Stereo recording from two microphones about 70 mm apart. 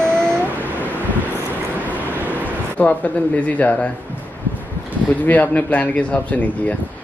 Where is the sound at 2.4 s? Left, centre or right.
Left.